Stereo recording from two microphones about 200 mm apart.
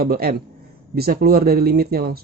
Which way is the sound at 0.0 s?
50° right (ahead or behind).